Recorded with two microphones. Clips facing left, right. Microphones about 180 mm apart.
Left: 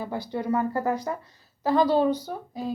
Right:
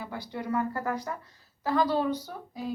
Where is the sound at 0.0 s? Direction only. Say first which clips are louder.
Left 6 dB; 30° left (ahead or behind).